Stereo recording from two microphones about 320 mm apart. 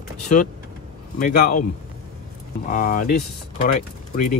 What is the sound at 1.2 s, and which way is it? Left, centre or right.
Speech, left.